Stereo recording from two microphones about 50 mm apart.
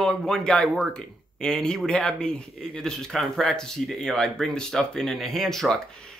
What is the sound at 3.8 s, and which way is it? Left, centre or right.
Speech, centre.